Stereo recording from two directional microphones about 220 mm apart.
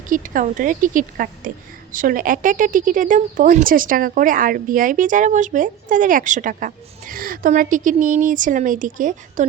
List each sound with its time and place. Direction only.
0.1 s a woman's voice: 35° right (ahead or behind)